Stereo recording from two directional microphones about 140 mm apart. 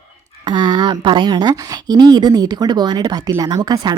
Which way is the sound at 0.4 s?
30° right (ahead or behind).